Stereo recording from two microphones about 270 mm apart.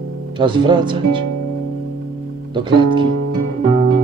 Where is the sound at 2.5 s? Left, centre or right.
Centre.